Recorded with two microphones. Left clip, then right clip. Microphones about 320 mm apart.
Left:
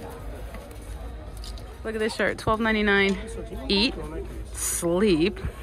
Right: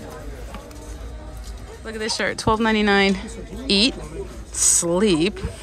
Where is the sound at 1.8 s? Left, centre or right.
Centre.